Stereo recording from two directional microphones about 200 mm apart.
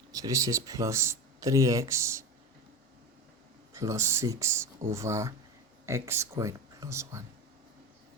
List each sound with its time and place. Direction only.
0.1 s speech: 15° right (ahead or behind)
3.7 s speech: 15° right (ahead or behind)